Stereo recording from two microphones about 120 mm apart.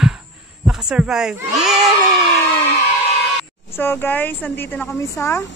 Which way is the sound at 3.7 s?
20° left (ahead or behind).